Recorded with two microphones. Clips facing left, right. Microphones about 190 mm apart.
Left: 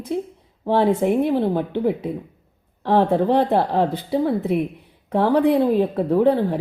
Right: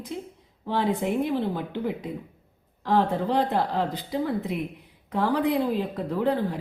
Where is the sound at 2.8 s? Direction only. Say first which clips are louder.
Left 6 dB; 55° left (ahead or behind).